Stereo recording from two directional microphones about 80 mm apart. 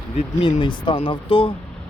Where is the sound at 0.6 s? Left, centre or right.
Left.